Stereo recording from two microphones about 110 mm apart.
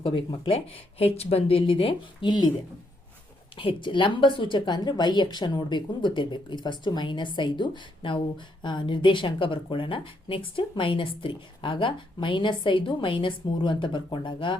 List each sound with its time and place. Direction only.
0.0 s speech: 50° left (ahead or behind)
3.6 s speech: 50° left (ahead or behind)